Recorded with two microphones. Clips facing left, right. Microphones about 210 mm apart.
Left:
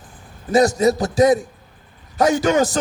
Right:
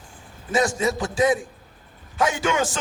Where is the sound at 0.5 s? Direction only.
40° left (ahead or behind).